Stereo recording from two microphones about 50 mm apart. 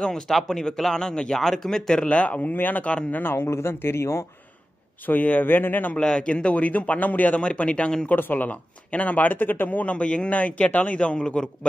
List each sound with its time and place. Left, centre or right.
0.0 s speech: centre
2.0 s a man's voice: left
3.4 s speech: left
5.0 s a man's voice: left
5.9 s speech: centre
8.1 s speech: left; by 11.5 s centre